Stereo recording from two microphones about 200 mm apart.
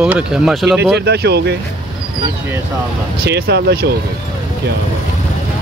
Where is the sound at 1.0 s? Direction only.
55° right (ahead or behind).